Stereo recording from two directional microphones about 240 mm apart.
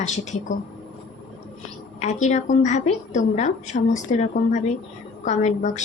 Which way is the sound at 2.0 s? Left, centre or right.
Left.